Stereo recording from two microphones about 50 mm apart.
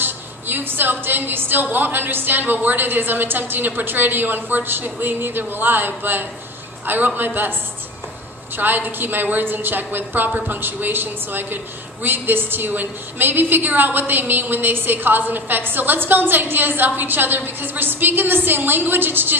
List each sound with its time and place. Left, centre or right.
0.0 s a woman's voice: right
8.5 s a woman's voice: right